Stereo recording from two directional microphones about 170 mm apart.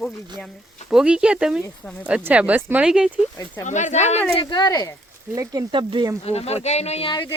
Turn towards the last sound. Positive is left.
turn(degrees=25)  # may be behind; listen again after turning